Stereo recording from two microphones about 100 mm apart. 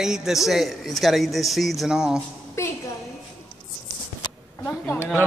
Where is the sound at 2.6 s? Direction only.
30° left (ahead or behind).